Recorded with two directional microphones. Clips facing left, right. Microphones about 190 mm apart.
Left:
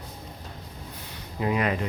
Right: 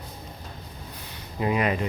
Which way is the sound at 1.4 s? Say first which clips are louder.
Right 1 dB; 15° right (ahead or behind).